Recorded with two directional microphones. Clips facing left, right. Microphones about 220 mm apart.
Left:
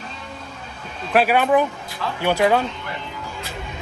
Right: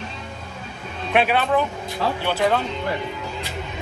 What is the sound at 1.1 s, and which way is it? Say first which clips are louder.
Speech: left 3 dB; 5° left (ahead or behind).